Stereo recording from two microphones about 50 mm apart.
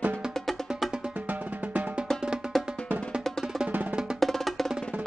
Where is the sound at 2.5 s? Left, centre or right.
Centre.